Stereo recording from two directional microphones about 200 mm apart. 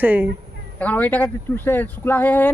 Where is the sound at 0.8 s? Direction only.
10° left (ahead or behind).